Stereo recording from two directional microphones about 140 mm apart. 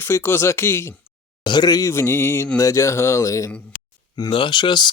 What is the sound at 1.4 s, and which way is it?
Speech, 30° left (ahead or behind).